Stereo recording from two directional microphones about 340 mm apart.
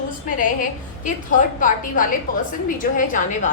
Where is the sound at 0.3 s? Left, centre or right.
Left.